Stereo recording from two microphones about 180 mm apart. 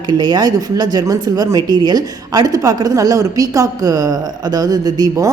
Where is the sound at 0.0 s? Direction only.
25° right (ahead or behind).